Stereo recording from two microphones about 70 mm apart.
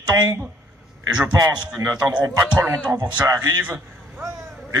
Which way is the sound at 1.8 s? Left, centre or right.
Right.